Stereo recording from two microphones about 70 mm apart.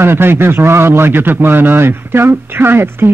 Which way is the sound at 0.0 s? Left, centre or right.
Right.